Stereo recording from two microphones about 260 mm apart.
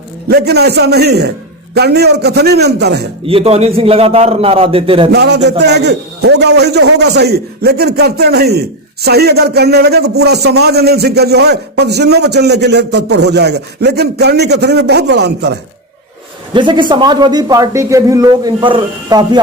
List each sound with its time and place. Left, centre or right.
0.3 s a man's voice: right
3.2 s a man's voice: right
5.1 s a man's voice: right
16.6 s a man's voice: centre